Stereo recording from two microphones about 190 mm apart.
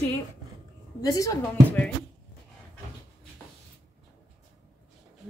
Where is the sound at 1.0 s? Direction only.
15° left (ahead or behind).